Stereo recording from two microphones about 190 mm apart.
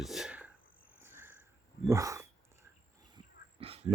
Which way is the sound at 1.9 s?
15° right (ahead or behind).